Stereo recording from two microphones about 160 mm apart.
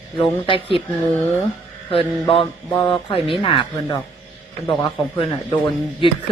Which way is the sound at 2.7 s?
25° left (ahead or behind).